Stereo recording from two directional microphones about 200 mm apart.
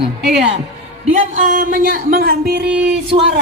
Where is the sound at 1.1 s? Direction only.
40° right (ahead or behind).